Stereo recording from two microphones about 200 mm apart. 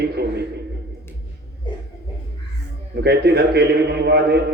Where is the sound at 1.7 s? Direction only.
25° left (ahead or behind).